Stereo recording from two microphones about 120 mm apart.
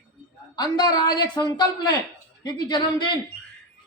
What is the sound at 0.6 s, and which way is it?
A man's voice, 35° left (ahead or behind).